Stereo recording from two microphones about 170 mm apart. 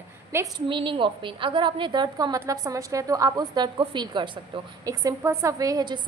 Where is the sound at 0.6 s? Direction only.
30° right (ahead or behind).